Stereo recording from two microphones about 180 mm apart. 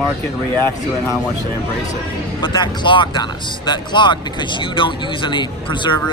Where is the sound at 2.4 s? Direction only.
25° left (ahead or behind).